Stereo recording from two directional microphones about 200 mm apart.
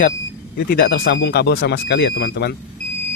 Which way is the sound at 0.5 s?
50° left (ahead or behind).